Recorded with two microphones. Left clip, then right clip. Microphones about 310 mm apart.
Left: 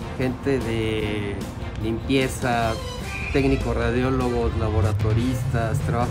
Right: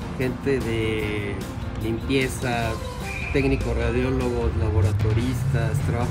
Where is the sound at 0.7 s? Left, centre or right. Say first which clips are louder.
Even; left.